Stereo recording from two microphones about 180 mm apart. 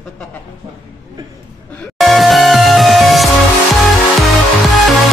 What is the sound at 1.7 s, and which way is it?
Music, centre (ahead or behind).